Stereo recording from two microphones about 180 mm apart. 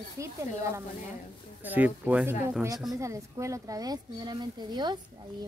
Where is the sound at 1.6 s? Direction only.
10° right (ahead or behind).